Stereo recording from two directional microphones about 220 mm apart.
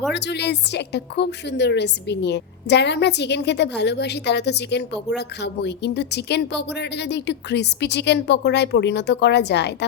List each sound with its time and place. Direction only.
0.1 s a woman's voice: 50° left (ahead or behind)